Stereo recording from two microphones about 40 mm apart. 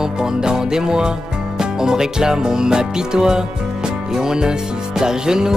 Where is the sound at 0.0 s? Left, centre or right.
Centre.